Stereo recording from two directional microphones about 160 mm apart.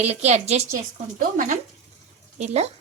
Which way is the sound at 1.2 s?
55° right (ahead or behind).